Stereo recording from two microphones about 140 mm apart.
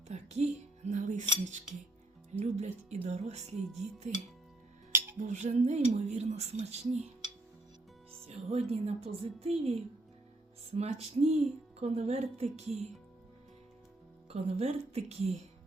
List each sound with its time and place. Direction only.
0.1 s music: 55° right (ahead or behind)
2.4 s speech: 55° right (ahead or behind)
5.2 s speech: 60° right (ahead or behind)
8.3 s speech: 50° right (ahead or behind)
14.3 s speech: 45° right (ahead or behind)